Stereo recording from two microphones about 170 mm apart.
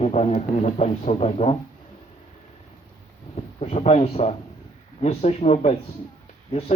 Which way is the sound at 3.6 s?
35° left (ahead or behind).